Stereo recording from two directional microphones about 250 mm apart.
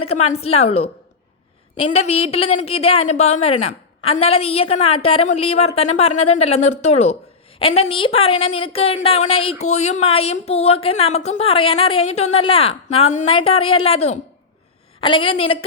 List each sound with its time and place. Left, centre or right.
0.1 s a woman's voice: left